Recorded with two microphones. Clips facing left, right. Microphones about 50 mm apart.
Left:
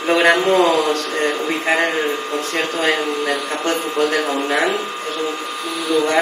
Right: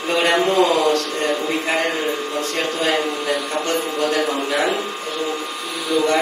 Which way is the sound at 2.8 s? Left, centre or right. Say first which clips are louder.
Left 2 dB; left.